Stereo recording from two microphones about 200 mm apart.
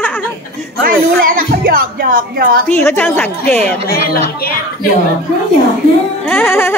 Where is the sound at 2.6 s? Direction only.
10° left (ahead or behind).